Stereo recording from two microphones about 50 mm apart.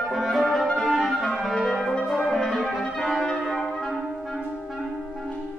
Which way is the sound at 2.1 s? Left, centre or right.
Centre.